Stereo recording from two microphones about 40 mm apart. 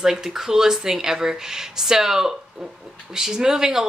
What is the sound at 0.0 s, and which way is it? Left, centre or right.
Speech, centre.